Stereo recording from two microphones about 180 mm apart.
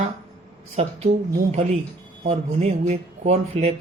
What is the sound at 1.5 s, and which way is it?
Speech, 40° right (ahead or behind).